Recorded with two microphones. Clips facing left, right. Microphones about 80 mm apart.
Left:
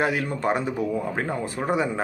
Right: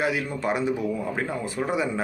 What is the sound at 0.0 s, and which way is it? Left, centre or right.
Speech, left.